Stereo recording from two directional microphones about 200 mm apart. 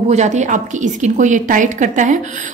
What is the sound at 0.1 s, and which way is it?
A woman's voice, 35° right (ahead or behind).